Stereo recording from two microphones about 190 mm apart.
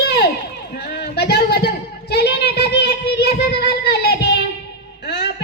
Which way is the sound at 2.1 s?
60° left (ahead or behind).